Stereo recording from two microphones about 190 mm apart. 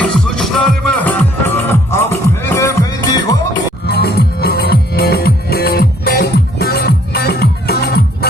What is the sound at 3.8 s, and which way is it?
Music, 60° left (ahead or behind).